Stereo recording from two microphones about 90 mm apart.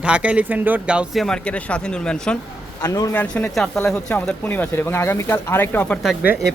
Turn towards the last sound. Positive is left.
turn(degrees=-5)  # may be behind; listen again after turning